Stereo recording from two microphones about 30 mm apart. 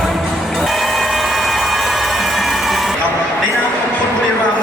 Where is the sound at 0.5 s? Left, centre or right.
Centre.